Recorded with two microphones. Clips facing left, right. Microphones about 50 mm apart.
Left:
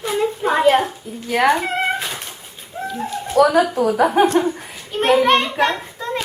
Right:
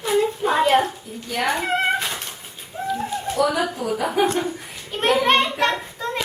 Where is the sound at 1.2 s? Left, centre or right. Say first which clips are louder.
Left 7 dB; left.